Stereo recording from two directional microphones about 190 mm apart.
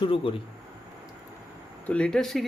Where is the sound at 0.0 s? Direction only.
25° left (ahead or behind).